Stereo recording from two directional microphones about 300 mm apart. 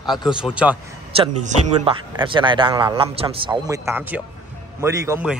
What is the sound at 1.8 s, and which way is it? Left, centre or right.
A man's voice, centre.